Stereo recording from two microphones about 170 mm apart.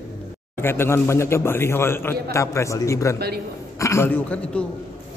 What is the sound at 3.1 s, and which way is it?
Speech, 65° right (ahead or behind).